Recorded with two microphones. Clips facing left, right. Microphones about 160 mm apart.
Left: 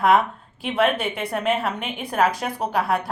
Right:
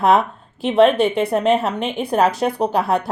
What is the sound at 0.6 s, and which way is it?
Speech, 30° right (ahead or behind).